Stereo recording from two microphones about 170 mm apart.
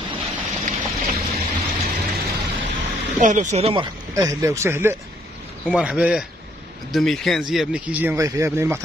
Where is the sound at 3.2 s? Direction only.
45° right (ahead or behind).